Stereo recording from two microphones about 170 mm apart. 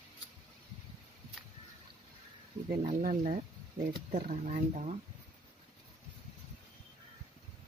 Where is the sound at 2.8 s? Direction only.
45° right (ahead or behind).